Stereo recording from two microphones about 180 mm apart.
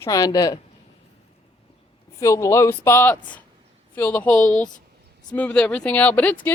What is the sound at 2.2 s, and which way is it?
Speech, 15° left (ahead or behind).